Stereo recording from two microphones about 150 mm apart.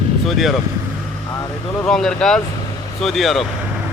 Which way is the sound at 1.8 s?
5° left (ahead or behind).